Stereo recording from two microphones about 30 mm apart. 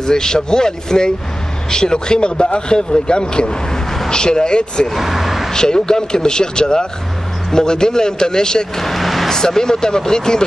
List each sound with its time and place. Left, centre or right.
0.0 s speech: left
3.7 s a sound: centre
4.1 s speech: left
4.9 s a sound: centre
5.5 s speech: left
8.7 s vehicle: centre
9.3 s speech: centre